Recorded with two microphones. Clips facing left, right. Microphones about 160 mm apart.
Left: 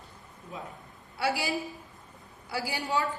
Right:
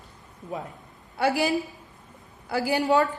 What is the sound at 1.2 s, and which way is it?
A woman's voice, 50° right (ahead or behind).